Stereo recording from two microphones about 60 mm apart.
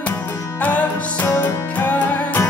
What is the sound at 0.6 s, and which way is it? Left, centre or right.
Music, left.